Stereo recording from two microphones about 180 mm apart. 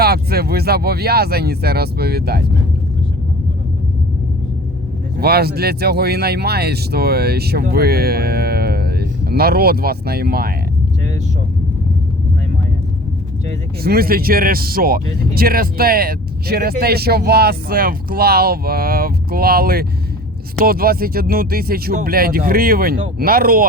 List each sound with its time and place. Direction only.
0.0 s speech: 60° right (ahead or behind)
5.2 s speech: 60° right (ahead or behind)
13.8 s speech: 55° right (ahead or behind)